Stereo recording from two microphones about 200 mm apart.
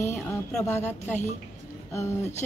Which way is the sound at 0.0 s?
15° left (ahead or behind).